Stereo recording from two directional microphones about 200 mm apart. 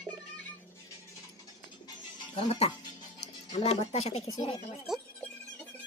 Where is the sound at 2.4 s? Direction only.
30° left (ahead or behind).